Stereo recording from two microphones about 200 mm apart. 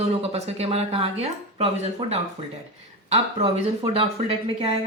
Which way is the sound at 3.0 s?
30° right (ahead or behind).